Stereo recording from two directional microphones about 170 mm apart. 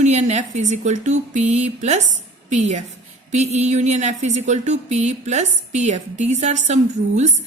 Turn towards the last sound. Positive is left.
turn(degrees=-45)  # may be behind; listen again after turning